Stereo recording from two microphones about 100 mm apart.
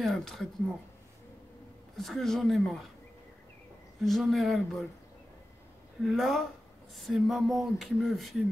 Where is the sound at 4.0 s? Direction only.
Centre (ahead or behind).